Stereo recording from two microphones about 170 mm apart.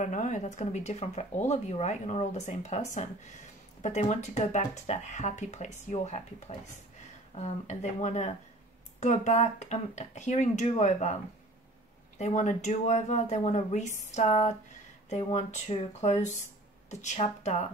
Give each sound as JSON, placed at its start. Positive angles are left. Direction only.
{"t": 0.0, "sound": "speech", "side_deg": 45}
{"t": 3.8, "sound": "speech", "side_deg": 45}
{"t": 12.2, "sound": "speech", "side_deg": 45}